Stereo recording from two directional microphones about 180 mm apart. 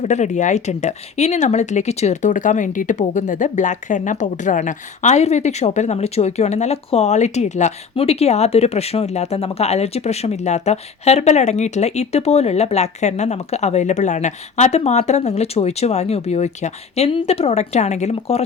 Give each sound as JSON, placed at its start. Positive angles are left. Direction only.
{"t": 0.0, "sound": "speech", "side_deg": 40}